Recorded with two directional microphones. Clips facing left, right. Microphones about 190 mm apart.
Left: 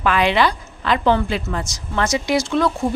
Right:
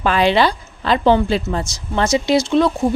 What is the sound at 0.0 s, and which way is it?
A woman's voice, 30° right (ahead or behind).